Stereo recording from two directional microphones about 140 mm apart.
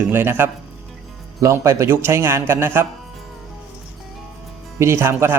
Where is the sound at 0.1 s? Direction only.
15° right (ahead or behind).